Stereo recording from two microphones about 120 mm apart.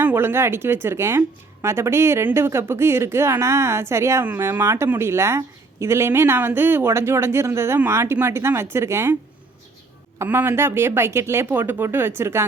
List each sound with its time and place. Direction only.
0.0 s a woman's voice: 20° right (ahead or behind)
10.2 s a woman's voice: 20° right (ahead or behind)